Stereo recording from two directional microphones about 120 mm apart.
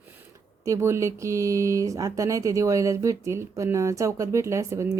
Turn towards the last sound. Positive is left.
turn(degrees=-25)  # may be behind; listen again after turning